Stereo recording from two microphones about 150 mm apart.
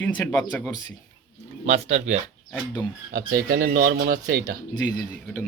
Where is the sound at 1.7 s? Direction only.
45° right (ahead or behind).